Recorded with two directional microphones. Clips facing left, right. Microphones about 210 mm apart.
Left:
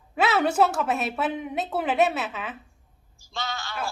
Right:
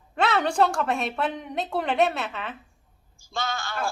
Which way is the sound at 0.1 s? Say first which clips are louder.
Left 1 dB; 5° left (ahead or behind).